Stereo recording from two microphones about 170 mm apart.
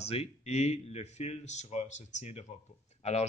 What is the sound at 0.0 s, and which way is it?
A man's voice, 35° left (ahead or behind).